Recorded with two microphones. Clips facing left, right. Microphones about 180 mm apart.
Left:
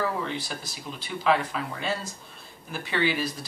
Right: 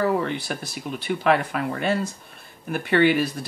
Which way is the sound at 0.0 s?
60° right (ahead or behind).